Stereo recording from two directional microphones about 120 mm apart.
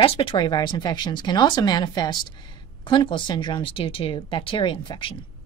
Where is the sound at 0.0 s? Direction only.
45° left (ahead or behind).